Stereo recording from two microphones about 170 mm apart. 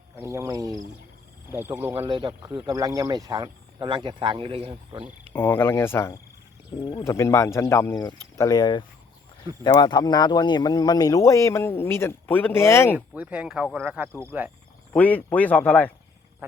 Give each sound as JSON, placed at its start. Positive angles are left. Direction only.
{"t": 0.2, "sound": "speech", "side_deg": -15}
{"t": 2.0, "sound": "speech", "side_deg": -30}
{"t": 5.3, "sound": "speech", "side_deg": 15}
{"t": 6.7, "sound": "speech", "side_deg": 25}
{"t": 13.1, "sound": "speech", "side_deg": -5}
{"t": 14.9, "sound": "speech", "side_deg": 10}
{"t": 16.4, "sound": "wild animals", "side_deg": -10}